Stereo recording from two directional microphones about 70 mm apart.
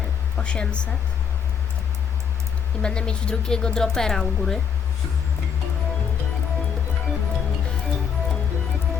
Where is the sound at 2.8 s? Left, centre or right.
Centre.